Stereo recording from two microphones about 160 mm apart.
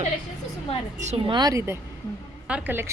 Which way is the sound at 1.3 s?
25° right (ahead or behind).